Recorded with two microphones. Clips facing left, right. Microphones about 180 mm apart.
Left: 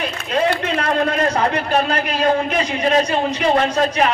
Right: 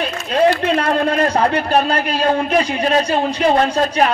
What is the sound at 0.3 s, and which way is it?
A man's voice, 35° right (ahead or behind).